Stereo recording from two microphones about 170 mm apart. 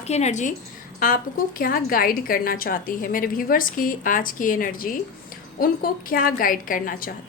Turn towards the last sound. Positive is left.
turn(degrees=55)  # may be behind; listen again after turning